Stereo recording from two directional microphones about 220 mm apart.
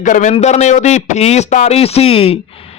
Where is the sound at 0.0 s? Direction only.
35° left (ahead or behind).